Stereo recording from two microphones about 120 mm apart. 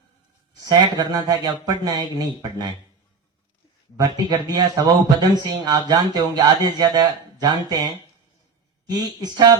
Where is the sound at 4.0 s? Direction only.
35° right (ahead or behind).